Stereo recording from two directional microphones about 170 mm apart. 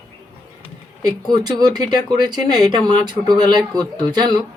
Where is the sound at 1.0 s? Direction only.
25° right (ahead or behind).